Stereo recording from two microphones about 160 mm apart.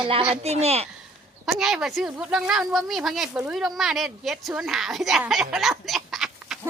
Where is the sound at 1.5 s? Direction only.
Centre (ahead or behind).